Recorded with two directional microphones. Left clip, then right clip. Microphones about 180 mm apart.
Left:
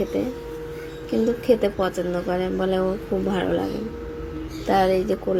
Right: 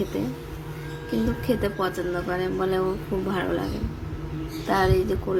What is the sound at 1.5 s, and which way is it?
Speech, 10° left (ahead or behind).